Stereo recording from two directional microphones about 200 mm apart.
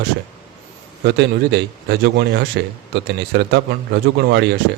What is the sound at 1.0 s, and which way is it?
A man's voice, 60° right (ahead or behind).